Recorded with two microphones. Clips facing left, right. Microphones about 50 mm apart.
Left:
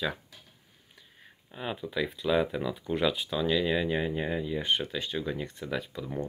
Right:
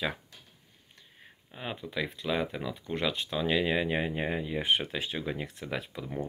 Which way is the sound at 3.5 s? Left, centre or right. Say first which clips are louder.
Even; centre.